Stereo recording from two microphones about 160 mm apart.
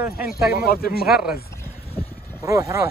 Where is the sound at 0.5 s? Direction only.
70° left (ahead or behind).